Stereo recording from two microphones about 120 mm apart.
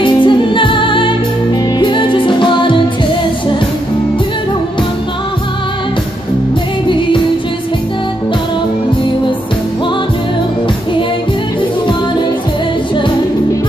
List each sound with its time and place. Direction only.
0.0 s music: 45° left (ahead or behind)